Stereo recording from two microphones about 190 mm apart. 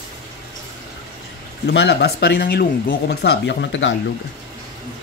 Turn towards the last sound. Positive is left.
turn(degrees=75)  # may be behind; listen again after turning